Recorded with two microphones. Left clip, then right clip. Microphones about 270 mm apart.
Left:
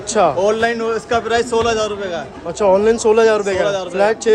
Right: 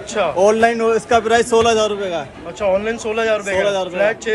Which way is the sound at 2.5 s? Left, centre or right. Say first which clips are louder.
Left 5 dB; centre.